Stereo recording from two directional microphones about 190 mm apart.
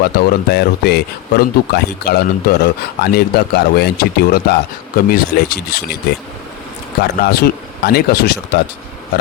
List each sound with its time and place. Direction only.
0.0 s speech: 55° left (ahead or behind)